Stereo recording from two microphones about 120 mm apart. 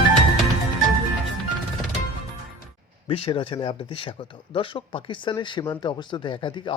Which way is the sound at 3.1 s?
45° left (ahead or behind).